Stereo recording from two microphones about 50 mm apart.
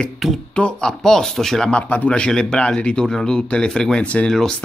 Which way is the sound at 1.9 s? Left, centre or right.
Left.